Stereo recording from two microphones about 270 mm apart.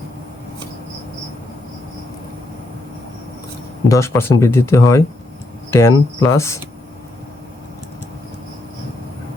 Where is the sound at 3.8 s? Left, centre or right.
Centre.